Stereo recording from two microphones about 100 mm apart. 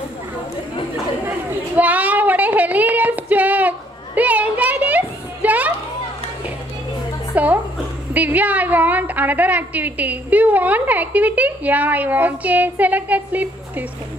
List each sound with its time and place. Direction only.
1.8 s female singing: 15° right (ahead or behind)
7.3 s a sound: 15° right (ahead or behind)
8.1 s a woman's voice: 15° right (ahead or behind)